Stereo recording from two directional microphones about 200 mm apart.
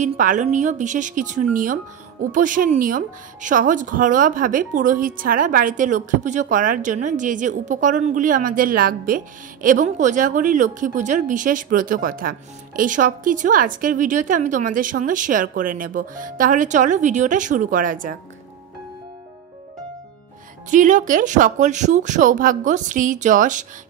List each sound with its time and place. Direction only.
0.0 s speech: 40° right (ahead or behind)
20.7 s speech: 40° right (ahead or behind)